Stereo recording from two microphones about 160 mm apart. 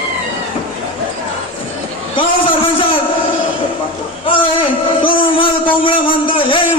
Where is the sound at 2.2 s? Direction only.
35° left (ahead or behind).